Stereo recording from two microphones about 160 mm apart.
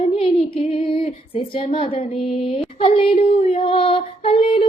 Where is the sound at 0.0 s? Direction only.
40° left (ahead or behind).